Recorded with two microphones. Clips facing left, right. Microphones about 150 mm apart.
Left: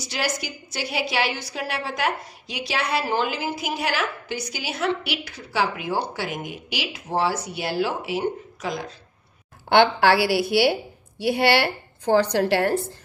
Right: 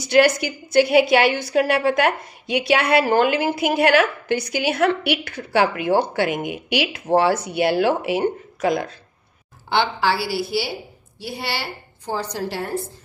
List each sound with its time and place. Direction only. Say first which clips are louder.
0.0 s a woman's voice: right 12 dB; 60° right (ahead or behind)
9.7 s a woman's voice: left 4 dB; 60° left (ahead or behind)